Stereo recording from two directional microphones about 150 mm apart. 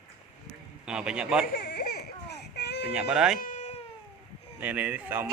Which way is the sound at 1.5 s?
90° left.